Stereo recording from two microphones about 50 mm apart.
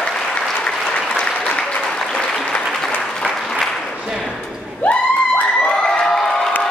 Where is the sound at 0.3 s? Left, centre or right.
Left.